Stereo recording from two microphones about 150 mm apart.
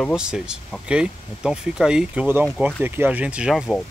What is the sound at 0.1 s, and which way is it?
Speech, 5° right (ahead or behind).